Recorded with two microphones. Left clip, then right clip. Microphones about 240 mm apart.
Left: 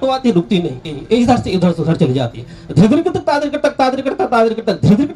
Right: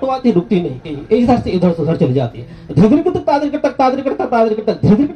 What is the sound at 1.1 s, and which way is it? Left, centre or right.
Speech, left.